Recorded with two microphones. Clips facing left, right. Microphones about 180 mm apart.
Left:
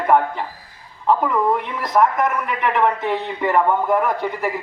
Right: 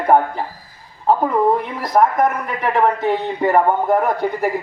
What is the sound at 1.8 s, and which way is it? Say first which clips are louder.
A man's voice: right 2 dB; 35° right (ahead or behind).